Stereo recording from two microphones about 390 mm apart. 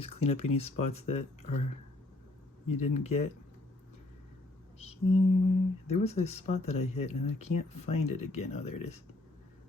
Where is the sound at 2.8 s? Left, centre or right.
Centre.